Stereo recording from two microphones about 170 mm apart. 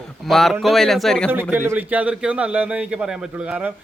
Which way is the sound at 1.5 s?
10° right (ahead or behind).